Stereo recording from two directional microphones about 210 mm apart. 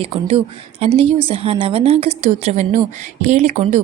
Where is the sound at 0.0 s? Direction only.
25° right (ahead or behind).